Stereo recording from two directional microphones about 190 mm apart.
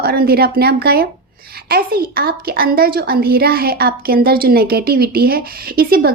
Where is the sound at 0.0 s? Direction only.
55° right (ahead or behind).